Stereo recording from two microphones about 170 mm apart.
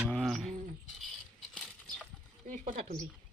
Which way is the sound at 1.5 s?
Centre (ahead or behind).